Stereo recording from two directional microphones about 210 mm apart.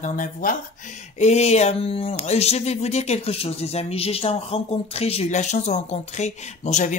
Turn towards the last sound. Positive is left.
turn(degrees=35)  # may be behind; listen again after turning